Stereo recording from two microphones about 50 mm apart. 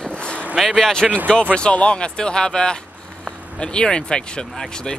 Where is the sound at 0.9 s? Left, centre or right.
Centre.